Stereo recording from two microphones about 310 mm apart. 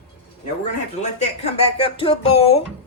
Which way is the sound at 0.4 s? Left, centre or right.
Left.